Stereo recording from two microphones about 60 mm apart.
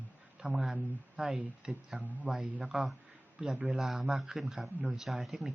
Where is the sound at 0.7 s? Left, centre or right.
Centre.